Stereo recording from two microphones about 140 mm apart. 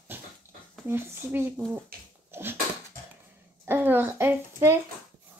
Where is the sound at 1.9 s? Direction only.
90° right.